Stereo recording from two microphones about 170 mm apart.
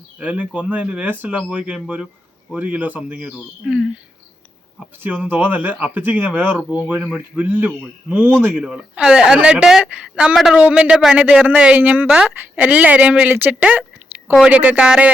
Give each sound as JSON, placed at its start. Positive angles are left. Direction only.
{"t": 0.2, "sound": "speech", "side_deg": -10}